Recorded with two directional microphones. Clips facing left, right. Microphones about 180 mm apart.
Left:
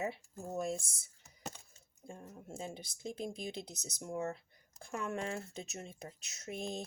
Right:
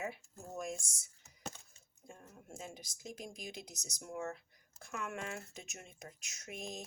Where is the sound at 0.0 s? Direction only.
30° left (ahead or behind).